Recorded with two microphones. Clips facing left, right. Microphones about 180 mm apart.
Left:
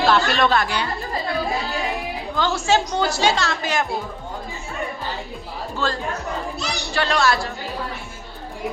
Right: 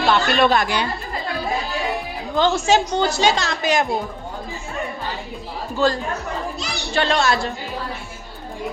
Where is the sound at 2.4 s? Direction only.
20° right (ahead or behind).